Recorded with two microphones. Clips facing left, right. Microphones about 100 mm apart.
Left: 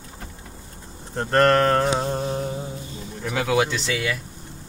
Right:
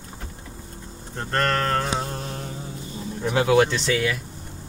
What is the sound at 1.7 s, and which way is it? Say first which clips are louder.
Music: left 5 dB; 25° left (ahead or behind).